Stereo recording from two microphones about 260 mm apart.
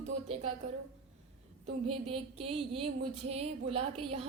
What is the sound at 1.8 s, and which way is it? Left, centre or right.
A woman's voice, right.